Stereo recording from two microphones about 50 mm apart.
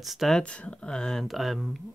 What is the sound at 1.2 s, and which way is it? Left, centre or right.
Speech, centre.